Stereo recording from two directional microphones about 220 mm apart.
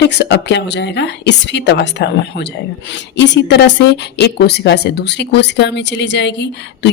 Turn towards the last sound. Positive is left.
turn(degrees=55)  # may be behind; listen again after turning